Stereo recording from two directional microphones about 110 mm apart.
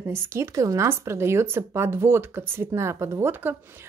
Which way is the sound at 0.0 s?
20° right (ahead or behind).